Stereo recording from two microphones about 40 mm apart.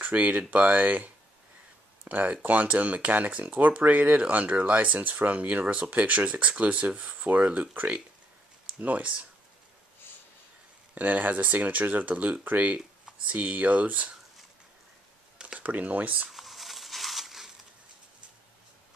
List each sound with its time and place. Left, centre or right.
0.0 s speech: right
8.7 s speech: right
11.0 s speech: right
12.7 s speech: right
15.6 s speech: right
16.3 s a sound: centre